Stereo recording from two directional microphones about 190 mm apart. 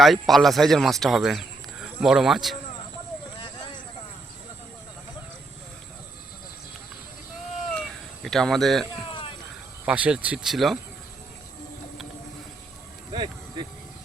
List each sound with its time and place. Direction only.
0.0 s a man's voice: centre (ahead or behind)
7.8 s a sound: centre (ahead or behind)
9.8 s a man's voice: 5° right (ahead or behind)
13.1 s speech: 25° right (ahead or behind)